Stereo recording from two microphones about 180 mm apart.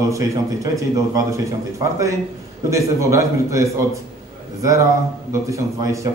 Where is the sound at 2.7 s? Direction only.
15° right (ahead or behind).